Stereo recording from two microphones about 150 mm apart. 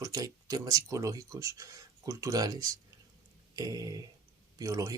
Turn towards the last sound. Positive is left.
turn(degrees=-20)  # may be behind; listen again after turning